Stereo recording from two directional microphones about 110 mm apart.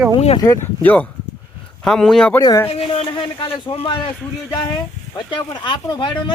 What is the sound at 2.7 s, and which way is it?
A man's voice, 55° left (ahead or behind).